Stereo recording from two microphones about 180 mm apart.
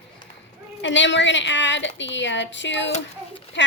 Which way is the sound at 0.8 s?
90° left.